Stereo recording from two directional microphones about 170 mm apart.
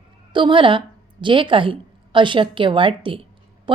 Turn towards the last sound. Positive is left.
turn(degrees=-30)  # may be behind; listen again after turning